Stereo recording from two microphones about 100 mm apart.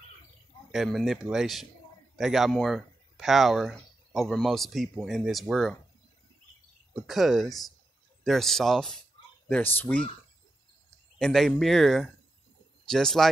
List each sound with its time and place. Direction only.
0.8 s speech: centre (ahead or behind)
7.0 s speech: centre (ahead or behind)
9.5 s speech: 20° left (ahead or behind)
11.1 s speech: 5° left (ahead or behind)